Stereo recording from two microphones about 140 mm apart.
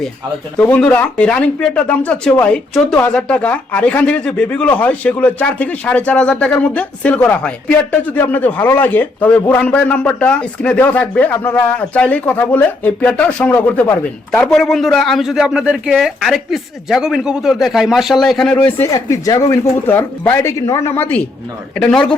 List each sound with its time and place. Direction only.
0.6 s a man's voice: 10° left (ahead or behind)
18.9 s speech: 25° left (ahead or behind); by 22.0 s 5° left (ahead or behind)